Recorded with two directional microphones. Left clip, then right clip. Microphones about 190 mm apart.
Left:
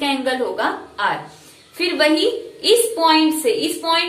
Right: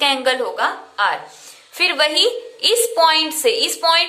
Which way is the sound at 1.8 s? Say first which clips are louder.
Right 1 dB; 40° right (ahead or behind).